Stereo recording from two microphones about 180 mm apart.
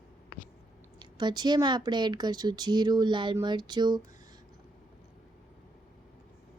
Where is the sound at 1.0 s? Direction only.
25° right (ahead or behind).